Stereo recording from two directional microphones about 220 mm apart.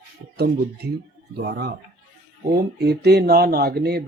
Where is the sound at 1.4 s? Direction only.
45° right (ahead or behind).